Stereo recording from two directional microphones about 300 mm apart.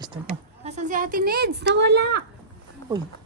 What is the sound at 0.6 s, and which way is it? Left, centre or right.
Speech, right.